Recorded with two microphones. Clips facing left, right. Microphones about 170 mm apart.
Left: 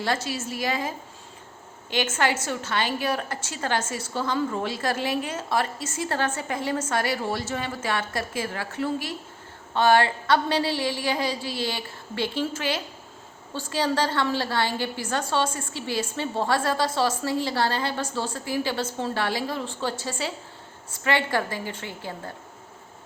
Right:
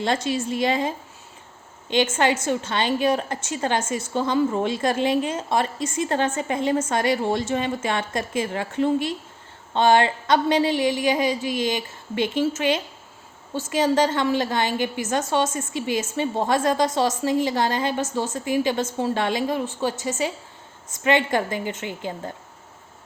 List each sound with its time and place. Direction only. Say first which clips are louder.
0.3 s a woman's voice: right 6 dB; 20° right (ahead or behind)
2.1 s a woman's voice: right 4 dB; 25° right (ahead or behind)